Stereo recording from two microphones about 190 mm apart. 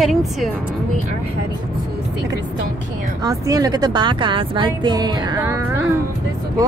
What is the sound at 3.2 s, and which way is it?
Speech, 20° right (ahead or behind).